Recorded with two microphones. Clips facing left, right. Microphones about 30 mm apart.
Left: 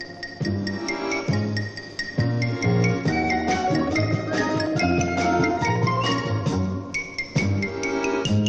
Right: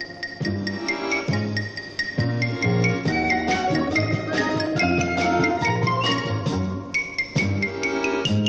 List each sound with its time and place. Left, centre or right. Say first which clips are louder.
0.8 s music: right 2 dB; right